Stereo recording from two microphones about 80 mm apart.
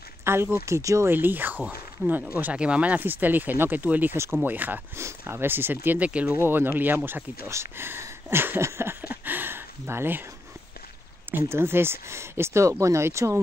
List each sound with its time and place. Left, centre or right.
0.2 s speech: right
1.1 s speech: right
4.9 s speech: right; by 6.3 s centre
6.3 s speech: right
11.3 s speech: right